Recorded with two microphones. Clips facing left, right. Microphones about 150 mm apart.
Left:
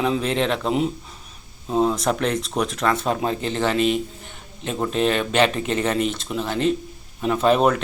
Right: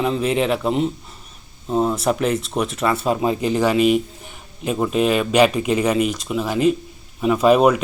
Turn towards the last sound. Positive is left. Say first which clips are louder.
# right 4 dB
turn(degrees=-10)  # may be behind; listen again after turning